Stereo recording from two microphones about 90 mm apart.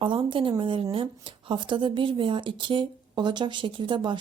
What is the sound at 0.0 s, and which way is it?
Speech, 65° right (ahead or behind).